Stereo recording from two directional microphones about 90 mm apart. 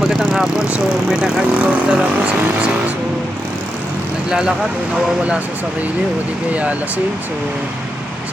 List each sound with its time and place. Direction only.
0.0 s vehicle: 5° left (ahead or behind)
0.4 s speech: 10° right (ahead or behind)
4.3 s speech: 10° right (ahead or behind)
6.5 s speech: 15° right (ahead or behind)